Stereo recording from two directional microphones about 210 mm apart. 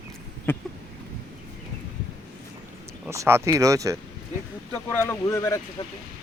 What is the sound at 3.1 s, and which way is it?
Speech, 15° right (ahead or behind).